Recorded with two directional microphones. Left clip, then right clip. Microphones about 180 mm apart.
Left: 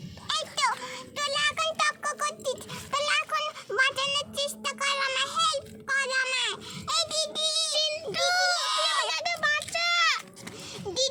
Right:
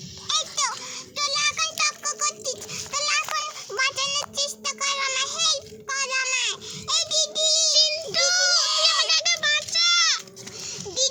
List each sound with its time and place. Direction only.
0.3 s music: 35° left (ahead or behind)
1.3 s child singing: 30° left (ahead or behind)